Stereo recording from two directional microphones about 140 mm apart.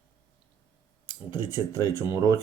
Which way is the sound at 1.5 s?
20° right (ahead or behind).